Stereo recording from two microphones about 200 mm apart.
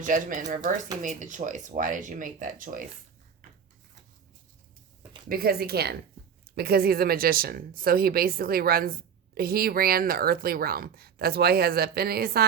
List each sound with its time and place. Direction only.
0.0 s a woman's voice: 40° right (ahead or behind)
5.3 s a woman's voice: 50° right (ahead or behind)